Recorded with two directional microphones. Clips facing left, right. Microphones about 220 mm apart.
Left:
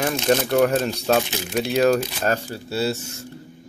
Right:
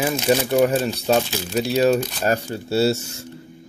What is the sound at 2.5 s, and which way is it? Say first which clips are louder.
Speech: right 6 dB; 25° right (ahead or behind).